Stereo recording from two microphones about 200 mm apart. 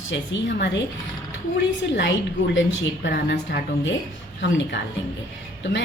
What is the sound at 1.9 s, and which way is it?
A woman's voice, 60° left (ahead or behind).